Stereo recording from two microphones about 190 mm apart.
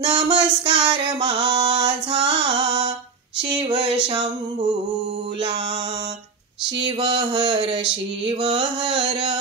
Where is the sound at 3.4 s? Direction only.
25° right (ahead or behind).